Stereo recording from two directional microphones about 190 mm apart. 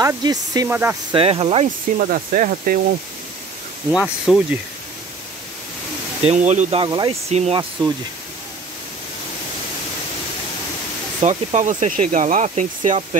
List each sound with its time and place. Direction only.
0.0 s speech: 20° right (ahead or behind)
1.1 s speech: 30° right (ahead or behind)
2.0 s speech: 45° right (ahead or behind)
3.9 s speech: centre (ahead or behind)
6.2 s speech: 35° right (ahead or behind)
11.2 s speech: 40° right (ahead or behind)